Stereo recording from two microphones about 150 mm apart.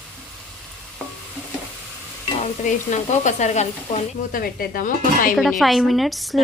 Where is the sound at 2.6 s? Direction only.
55° left (ahead or behind).